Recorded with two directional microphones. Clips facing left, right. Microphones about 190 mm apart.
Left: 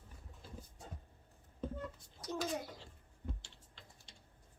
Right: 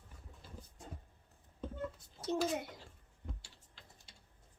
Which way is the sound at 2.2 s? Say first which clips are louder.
Right 4 dB; 25° right (ahead or behind).